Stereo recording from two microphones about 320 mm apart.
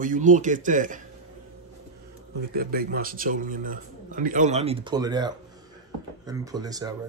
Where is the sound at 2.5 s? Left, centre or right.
Right; by 6.9 s centre.